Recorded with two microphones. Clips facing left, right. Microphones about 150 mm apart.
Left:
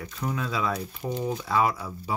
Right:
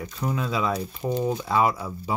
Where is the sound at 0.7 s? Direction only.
35° right (ahead or behind).